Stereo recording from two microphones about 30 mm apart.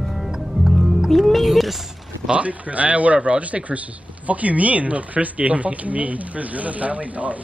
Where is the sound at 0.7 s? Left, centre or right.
Centre.